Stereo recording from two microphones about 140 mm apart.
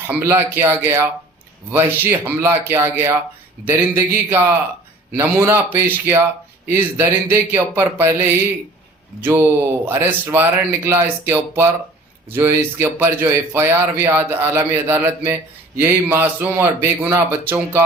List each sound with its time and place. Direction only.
0.1 s speech: 15° right (ahead or behind)